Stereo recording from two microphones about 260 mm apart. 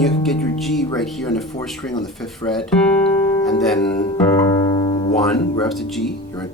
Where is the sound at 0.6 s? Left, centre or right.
Centre.